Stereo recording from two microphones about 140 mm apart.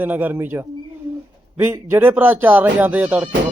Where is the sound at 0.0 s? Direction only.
10° right (ahead or behind).